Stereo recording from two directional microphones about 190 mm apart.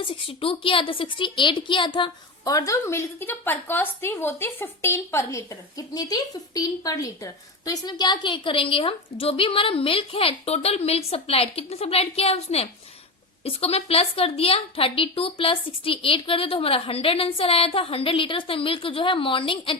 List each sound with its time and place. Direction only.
0.0 s a woman's voice: 30° left (ahead or behind)